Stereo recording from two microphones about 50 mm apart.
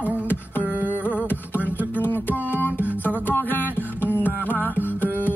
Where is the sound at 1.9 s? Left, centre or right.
Left.